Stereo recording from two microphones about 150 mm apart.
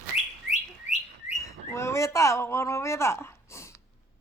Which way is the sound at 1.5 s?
20° left (ahead or behind).